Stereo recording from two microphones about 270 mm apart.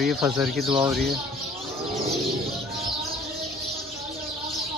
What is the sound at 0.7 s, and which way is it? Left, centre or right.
Speech, centre.